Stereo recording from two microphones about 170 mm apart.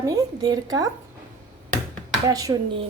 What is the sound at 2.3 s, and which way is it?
Speech, 20° right (ahead or behind).